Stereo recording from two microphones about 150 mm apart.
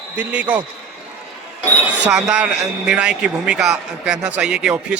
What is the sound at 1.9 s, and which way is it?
Speech, 5° right (ahead or behind).